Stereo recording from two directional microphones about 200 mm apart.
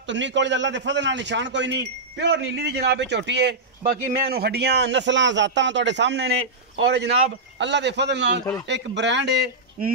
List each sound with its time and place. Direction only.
0.0 s a man's voice: 65° right (ahead or behind)